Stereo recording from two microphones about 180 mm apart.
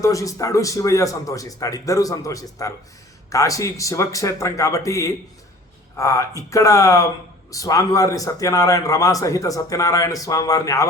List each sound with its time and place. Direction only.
0.0 s a man's voice: 20° left (ahead or behind)